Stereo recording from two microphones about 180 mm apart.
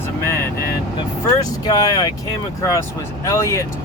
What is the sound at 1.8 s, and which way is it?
Speech, 20° left (ahead or behind).